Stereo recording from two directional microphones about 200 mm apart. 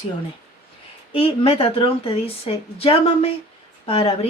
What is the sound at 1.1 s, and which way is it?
A woman's voice, 30° left (ahead or behind).